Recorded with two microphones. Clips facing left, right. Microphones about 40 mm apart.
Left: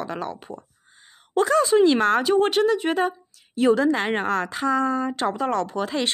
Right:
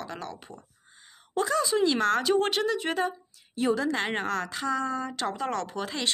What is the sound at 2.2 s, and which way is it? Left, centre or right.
Speech, centre.